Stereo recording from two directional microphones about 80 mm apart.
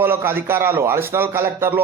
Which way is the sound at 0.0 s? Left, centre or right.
Right.